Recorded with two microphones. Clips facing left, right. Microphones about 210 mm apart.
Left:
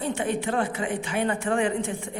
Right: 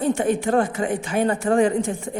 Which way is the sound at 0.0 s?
45° right (ahead or behind).